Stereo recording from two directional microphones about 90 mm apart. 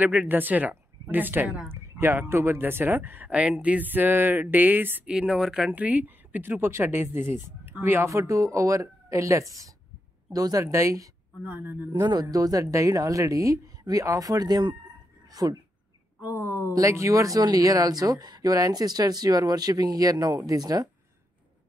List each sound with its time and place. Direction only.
0.0 s speech: 15° right (ahead or behind)
5.1 s speech: 5° right (ahead or behind)
5.7 s speech: 20° right (ahead or behind); by 11.1 s 35° right (ahead or behind)
11.4 s speech: 20° right (ahead or behind)
11.9 s speech: 50° right (ahead or behind)
15.3 s speech: 45° right (ahead or behind)
16.2 s a sound: 20° right (ahead or behind)
16.7 s speech: 35° right (ahead or behind)